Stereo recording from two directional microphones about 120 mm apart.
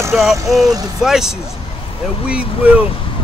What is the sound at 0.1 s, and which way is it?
Speech, centre (ahead or behind).